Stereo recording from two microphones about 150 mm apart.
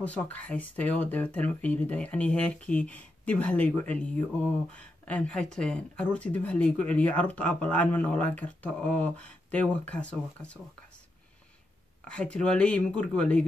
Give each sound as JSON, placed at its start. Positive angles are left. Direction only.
{"t": 0.0, "sound": "speech", "side_deg": 10}
{"t": 12.1, "sound": "speech", "side_deg": 5}